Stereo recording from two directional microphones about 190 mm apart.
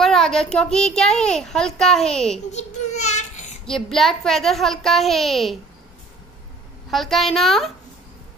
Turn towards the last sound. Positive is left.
turn(degrees=0)  # may be behind; listen again after turning